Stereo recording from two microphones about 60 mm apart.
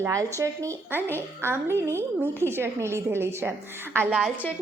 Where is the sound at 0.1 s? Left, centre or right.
Right.